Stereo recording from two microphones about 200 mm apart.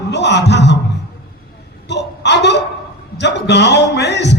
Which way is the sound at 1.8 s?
60° left (ahead or behind).